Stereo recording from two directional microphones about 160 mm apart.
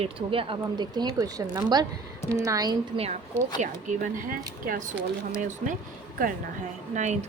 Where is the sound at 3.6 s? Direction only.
55° right (ahead or behind).